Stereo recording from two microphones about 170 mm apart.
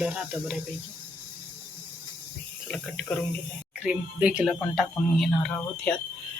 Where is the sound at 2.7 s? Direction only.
5° left (ahead or behind).